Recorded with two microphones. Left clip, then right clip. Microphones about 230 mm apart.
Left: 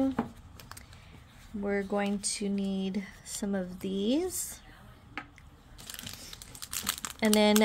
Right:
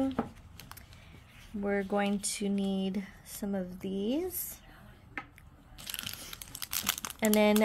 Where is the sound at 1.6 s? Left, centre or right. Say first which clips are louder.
Even; centre.